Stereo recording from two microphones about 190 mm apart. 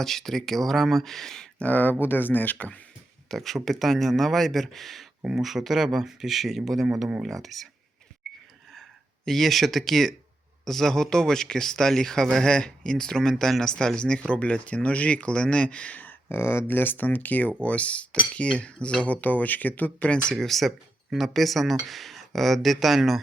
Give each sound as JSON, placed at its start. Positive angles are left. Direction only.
{"t": 0.0, "sound": "speech", "side_deg": 0}
{"t": 8.2, "sound": "wheeze", "side_deg": 0}
{"t": 8.7, "sound": "a sound", "side_deg": 0}
{"t": 10.7, "sound": "speech", "side_deg": 0}